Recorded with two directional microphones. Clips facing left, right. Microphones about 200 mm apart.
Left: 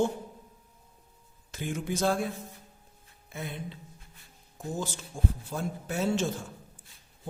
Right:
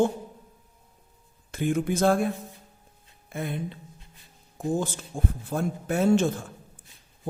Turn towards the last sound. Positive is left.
turn(degrees=-55)  # may be behind; listen again after turning